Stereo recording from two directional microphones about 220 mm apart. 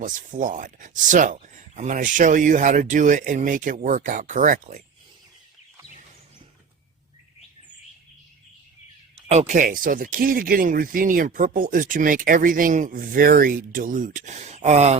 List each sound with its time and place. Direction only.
0.0 s speech: 35° right (ahead or behind)
9.3 s speech: 30° right (ahead or behind)